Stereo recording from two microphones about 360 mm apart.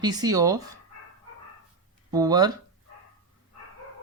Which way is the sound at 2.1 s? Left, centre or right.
Centre.